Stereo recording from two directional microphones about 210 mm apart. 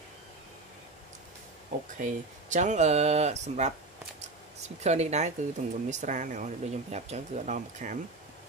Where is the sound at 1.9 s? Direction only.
35° right (ahead or behind).